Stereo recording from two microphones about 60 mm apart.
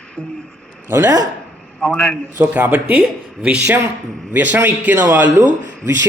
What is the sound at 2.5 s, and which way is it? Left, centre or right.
Speech, right.